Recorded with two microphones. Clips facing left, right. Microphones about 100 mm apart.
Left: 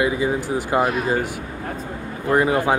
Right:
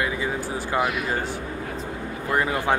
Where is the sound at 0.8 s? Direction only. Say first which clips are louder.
Left 4 dB; 35° left (ahead or behind).